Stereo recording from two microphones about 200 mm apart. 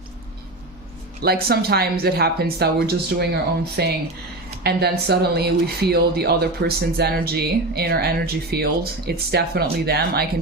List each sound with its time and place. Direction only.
1.2 s speech: 50° right (ahead or behind)